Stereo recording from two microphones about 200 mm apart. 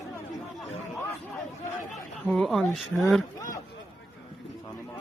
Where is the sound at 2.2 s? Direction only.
5° left (ahead or behind).